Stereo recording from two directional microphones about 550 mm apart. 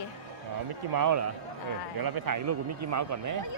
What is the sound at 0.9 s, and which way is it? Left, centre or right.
A man's voice, right.